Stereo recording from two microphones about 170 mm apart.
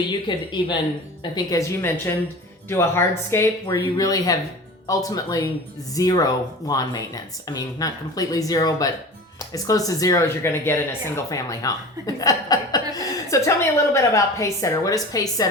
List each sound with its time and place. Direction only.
0.1 s speech: 25° left (ahead or behind)